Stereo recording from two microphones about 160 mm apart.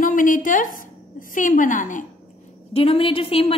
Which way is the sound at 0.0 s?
55° left (ahead or behind).